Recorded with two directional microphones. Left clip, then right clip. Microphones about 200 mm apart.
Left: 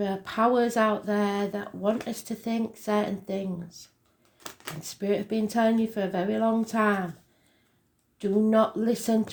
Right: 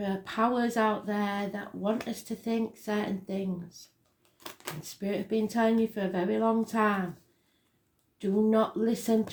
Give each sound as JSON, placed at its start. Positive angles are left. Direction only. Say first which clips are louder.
{"t": 0.0, "sound": "speech", "louder": "left 4 dB", "side_deg": 35}
{"t": 4.4, "sound": "a sound", "louder": "left 1 dB", "side_deg": 0}
{"t": 4.8, "sound": "speech", "louder": "left 7 dB", "side_deg": 35}
{"t": 8.2, "sound": "speech", "louder": "left 3 dB", "side_deg": 30}